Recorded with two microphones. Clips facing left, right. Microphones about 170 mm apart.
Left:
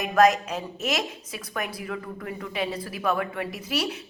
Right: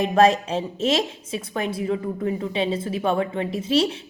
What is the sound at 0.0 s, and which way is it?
A woman's voice, 30° right (ahead or behind).